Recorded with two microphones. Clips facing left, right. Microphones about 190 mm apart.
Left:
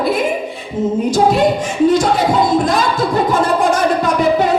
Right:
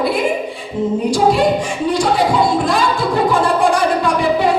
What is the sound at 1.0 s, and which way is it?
Speech, 45° left (ahead or behind).